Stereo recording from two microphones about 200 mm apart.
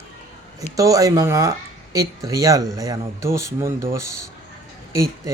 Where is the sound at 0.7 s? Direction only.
15° right (ahead or behind).